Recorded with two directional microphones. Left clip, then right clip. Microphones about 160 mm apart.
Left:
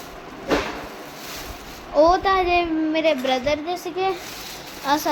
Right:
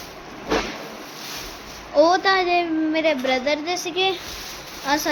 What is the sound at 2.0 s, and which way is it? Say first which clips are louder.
A child's voice: even; centre (ahead or behind).